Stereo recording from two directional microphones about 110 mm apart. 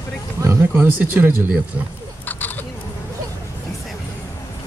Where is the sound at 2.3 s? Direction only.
15° left (ahead or behind).